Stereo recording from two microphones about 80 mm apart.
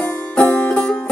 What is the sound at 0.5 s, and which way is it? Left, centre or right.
Music, centre.